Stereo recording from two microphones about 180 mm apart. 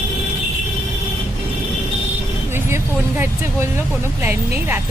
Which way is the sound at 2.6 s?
15° right (ahead or behind).